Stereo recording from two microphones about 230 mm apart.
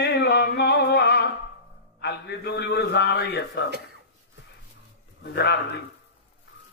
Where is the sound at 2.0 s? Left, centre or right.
Left.